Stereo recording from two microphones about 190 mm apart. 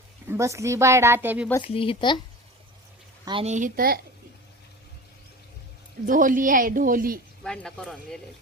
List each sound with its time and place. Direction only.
0.3 s speech: 15° right (ahead or behind)
1.6 s speech: 30° left (ahead or behind)
3.2 s speech: 25° right (ahead or behind)
3.5 s a woman's voice: 45° right (ahead or behind)
6.1 s a woman's voice: 45° right (ahead or behind)
7.4 s speech: 5° left (ahead or behind)